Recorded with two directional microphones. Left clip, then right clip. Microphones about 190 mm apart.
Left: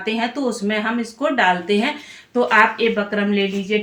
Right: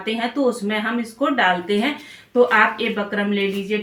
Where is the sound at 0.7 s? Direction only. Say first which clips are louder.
Left 1 dB; 25° left (ahead or behind).